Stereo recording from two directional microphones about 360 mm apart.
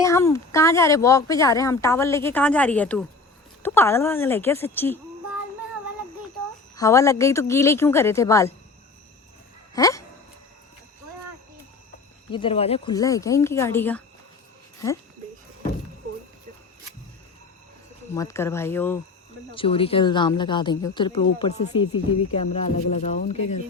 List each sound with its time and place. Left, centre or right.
0.0 s speech: centre
6.7 s speech: centre
9.7 s speech: centre
12.3 s speech: centre
18.1 s speech: centre